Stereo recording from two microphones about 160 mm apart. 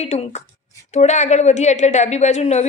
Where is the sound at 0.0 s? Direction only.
45° left (ahead or behind).